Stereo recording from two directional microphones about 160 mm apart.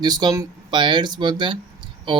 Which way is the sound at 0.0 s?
25° right (ahead or behind).